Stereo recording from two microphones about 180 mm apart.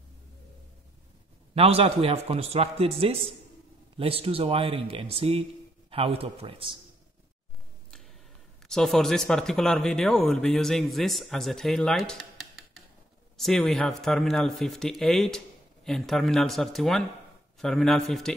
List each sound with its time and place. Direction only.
1.5 s a man's voice: 35° right (ahead or behind)
8.6 s speech: centre (ahead or behind)